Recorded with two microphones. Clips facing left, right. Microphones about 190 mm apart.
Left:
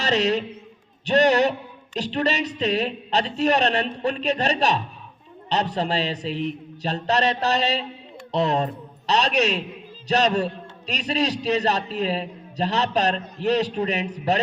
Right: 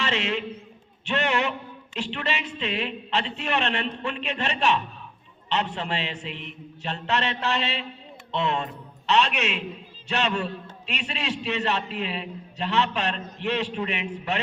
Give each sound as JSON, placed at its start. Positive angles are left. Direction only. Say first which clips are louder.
{"t": 0.0, "sound": "a man's voice", "louder": "left 6 dB", "side_deg": 40}